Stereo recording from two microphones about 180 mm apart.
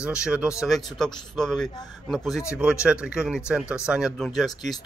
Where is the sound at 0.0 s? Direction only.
5° right (ahead or behind).